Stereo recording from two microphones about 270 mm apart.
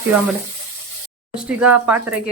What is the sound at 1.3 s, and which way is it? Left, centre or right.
Speech, centre.